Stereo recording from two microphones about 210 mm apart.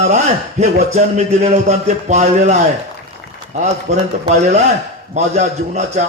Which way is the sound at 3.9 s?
30° right (ahead or behind).